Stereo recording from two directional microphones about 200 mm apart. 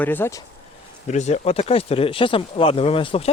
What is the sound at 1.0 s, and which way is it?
Speech, 35° left (ahead or behind).